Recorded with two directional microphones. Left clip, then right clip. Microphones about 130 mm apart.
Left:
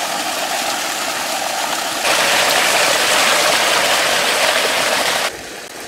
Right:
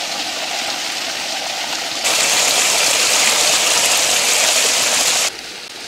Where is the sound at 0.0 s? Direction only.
15° left (ahead or behind).